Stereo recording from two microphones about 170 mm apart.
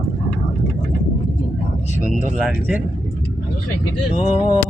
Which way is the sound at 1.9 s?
45° left (ahead or behind).